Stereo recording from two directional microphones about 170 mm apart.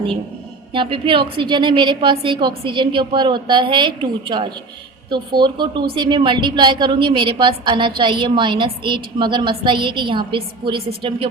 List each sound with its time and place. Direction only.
0.7 s a woman's voice: 30° right (ahead or behind)